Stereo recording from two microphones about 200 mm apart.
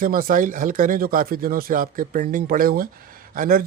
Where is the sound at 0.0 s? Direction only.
45° right (ahead or behind).